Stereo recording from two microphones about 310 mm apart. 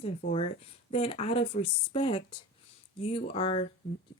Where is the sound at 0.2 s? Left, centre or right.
Centre.